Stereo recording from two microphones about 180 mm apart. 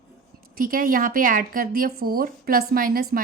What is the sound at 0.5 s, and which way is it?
A woman's voice, 50° right (ahead or behind).